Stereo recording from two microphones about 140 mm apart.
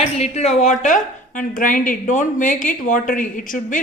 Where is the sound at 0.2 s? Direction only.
50° left (ahead or behind).